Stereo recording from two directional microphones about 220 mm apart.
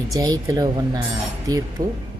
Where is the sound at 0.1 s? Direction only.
15° right (ahead or behind).